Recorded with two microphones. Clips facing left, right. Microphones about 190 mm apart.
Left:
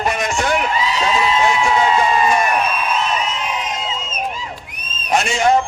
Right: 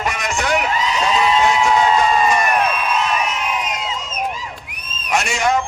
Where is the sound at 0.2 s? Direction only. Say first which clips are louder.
Left 3 dB; 25° left (ahead or behind).